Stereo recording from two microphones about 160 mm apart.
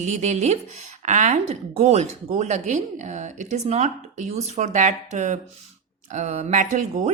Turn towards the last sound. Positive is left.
turn(degrees=-50)  # may be behind; listen again after turning